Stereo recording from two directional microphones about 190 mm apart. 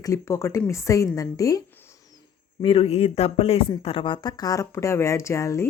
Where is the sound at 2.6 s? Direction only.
30° left (ahead or behind).